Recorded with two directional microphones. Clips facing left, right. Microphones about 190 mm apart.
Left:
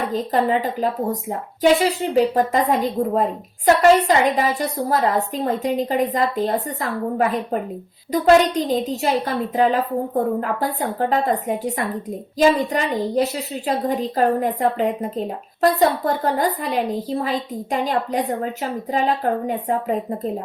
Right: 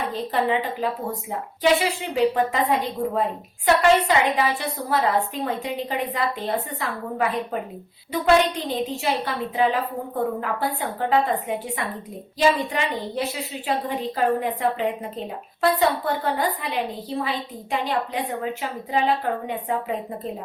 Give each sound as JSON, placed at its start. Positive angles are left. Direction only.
{"t": 0.1, "sound": "a woman's voice", "side_deg": 40}